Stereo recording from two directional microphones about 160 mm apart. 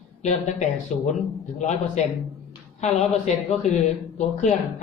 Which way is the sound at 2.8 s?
45° left (ahead or behind).